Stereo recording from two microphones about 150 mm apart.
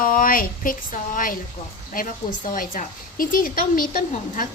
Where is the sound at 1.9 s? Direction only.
65° left (ahead or behind).